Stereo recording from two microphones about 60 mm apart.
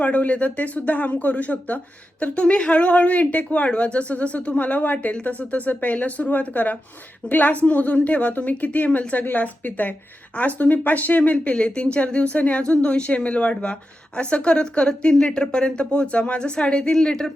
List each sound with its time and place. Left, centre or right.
0.0 s speech: left